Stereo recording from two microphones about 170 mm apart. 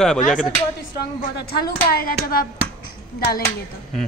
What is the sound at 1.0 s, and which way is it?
Speech, 65° left (ahead or behind).